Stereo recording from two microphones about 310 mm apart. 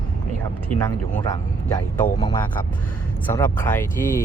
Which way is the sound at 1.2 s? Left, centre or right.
Centre.